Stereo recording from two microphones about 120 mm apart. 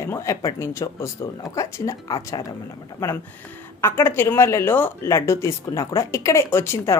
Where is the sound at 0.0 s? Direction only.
25° left (ahead or behind).